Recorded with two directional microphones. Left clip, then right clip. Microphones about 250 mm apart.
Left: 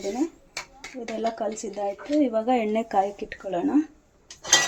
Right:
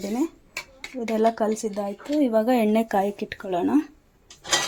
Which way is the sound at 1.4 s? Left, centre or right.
Right.